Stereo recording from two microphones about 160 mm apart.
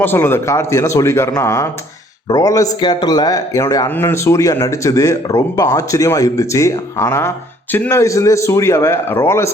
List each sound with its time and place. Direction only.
0.0 s a man's voice: 15° left (ahead or behind)